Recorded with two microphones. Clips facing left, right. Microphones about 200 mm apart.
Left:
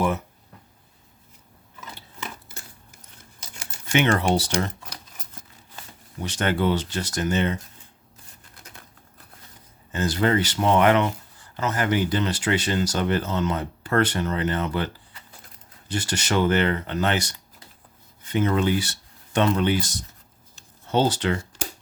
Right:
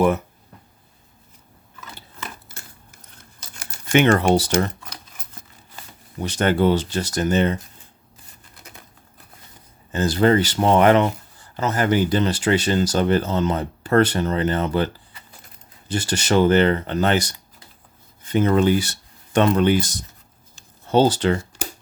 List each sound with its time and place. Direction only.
3.9 s speech: 45° right (ahead or behind)
6.2 s speech: 40° right (ahead or behind)
9.9 s speech: 35° right (ahead or behind)
15.9 s speech: 30° right (ahead or behind); by 19.8 s 50° right (ahead or behind)
20.9 s speech: 35° right (ahead or behind)